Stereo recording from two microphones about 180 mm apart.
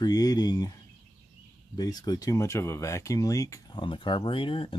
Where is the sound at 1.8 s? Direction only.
20° left (ahead or behind).